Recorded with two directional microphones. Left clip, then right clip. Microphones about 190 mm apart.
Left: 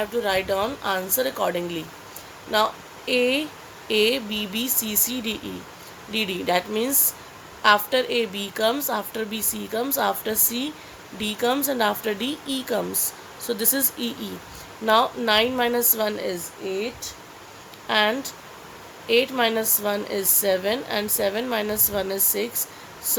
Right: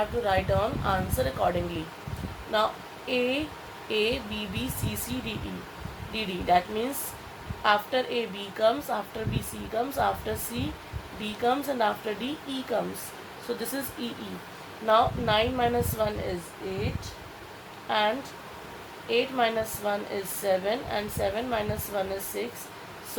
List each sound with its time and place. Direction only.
0.3 s speech: 50° left (ahead or behind)
2.5 s speech: 55° left (ahead or behind)
14.8 s speech: 55° left (ahead or behind)
17.8 s speech: 55° left (ahead or behind)